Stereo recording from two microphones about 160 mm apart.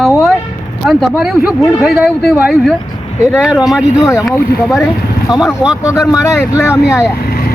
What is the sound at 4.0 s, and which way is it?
Speech, 20° left (ahead or behind).